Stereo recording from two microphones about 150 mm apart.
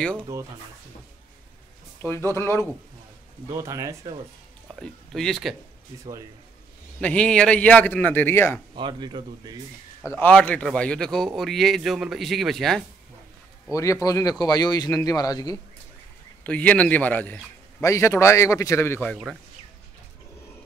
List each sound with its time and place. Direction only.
0.2 s speech: 20° right (ahead or behind)
2.0 s a man's voice: 15° left (ahead or behind)
3.4 s speech: 20° right (ahead or behind)
4.7 s speech: centre (ahead or behind)
7.0 s a man's voice: 10° left (ahead or behind)
8.7 s speech: 30° right (ahead or behind)
10.0 s speech: 15° left (ahead or behind)
13.7 s a man's voice: 20° left (ahead or behind)
16.4 s a man's voice: 10° left (ahead or behind)